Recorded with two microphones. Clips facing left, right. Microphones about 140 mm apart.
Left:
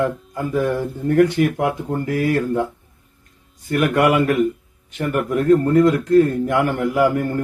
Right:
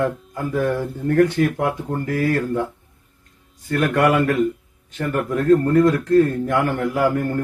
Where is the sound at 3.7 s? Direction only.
20° left (ahead or behind).